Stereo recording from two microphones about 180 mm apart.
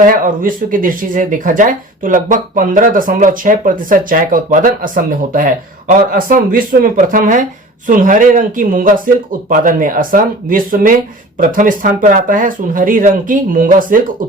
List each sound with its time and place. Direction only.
0.0 s speech: 50° right (ahead or behind)